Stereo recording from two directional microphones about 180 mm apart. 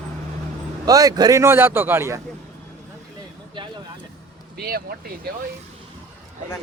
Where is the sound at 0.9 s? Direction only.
20° right (ahead or behind).